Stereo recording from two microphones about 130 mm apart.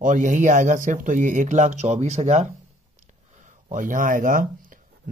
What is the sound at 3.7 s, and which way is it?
Speech, 85° right.